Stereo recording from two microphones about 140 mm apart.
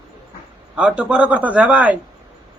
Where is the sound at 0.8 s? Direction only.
10° right (ahead or behind).